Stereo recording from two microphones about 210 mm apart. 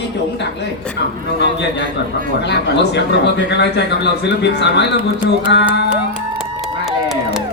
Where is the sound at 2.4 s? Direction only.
55° left (ahead or behind).